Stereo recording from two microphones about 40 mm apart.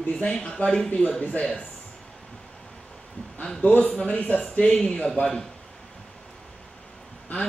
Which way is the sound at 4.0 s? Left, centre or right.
Left.